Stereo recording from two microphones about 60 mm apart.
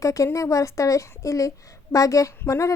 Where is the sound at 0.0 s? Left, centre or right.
Left.